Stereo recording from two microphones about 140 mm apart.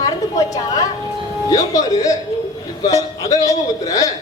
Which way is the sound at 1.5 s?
25° left (ahead or behind).